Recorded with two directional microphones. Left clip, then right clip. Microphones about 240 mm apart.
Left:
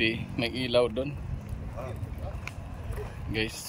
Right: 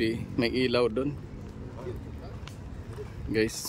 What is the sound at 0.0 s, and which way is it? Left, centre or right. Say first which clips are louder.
Speech: even; centre.